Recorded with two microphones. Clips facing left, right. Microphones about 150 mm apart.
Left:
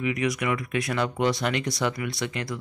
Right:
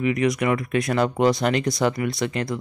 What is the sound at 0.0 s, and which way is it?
Speech, 40° right (ahead or behind).